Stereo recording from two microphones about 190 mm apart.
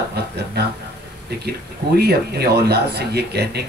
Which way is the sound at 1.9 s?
55° right (ahead or behind).